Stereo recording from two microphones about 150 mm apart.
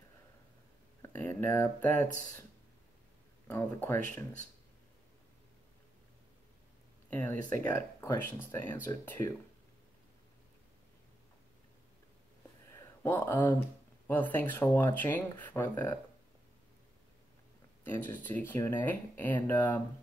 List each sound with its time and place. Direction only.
1.0 s speech: 15° left (ahead or behind)
3.4 s speech: 15° left (ahead or behind)
7.1 s speech: 10° left (ahead or behind)
12.7 s a sound: 15° left (ahead or behind)
14.0 s speech: 10° left (ahead or behind)
17.8 s speech: 10° left (ahead or behind)